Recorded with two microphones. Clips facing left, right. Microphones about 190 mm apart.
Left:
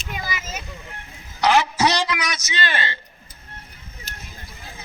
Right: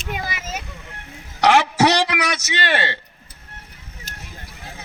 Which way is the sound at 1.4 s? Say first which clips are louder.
Right 3 dB; 70° right (ahead or behind).